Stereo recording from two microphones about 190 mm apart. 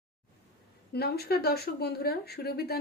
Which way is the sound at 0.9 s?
55° left (ahead or behind).